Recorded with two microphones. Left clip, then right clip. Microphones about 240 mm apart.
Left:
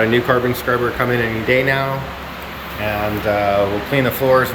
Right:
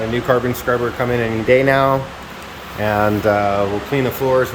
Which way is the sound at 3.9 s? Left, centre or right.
Centre.